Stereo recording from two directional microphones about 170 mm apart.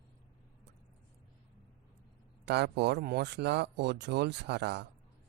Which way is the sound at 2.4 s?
80° right.